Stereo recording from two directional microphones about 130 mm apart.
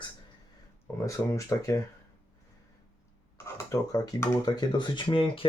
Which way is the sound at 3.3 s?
25° left (ahead or behind).